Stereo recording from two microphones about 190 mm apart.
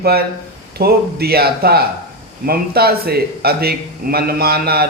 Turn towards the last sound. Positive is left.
turn(degrees=-55)  # may be behind; listen again after turning